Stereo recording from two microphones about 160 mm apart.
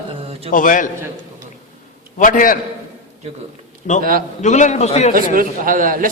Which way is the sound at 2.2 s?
55° left (ahead or behind).